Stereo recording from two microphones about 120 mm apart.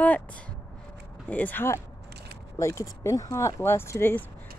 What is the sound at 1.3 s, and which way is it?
Speech, 15° left (ahead or behind).